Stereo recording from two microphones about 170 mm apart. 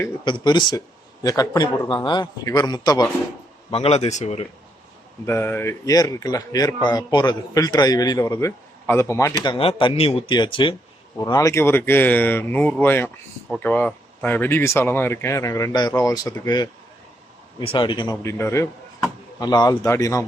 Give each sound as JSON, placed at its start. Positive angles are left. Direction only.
{"t": 0.3, "sound": "speech", "side_deg": 25}
{"t": 3.7, "sound": "speech", "side_deg": 35}
{"t": 5.2, "sound": "speech", "side_deg": 15}
{"t": 17.6, "sound": "speech", "side_deg": 30}